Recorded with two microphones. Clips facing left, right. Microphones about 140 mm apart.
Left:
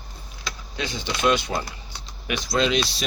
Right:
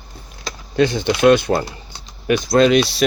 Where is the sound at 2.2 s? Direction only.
50° right (ahead or behind).